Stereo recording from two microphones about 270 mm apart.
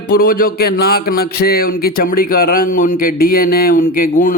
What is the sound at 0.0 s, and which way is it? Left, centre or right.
Speech, left.